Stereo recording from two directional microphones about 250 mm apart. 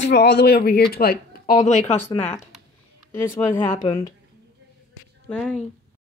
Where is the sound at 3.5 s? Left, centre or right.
Centre.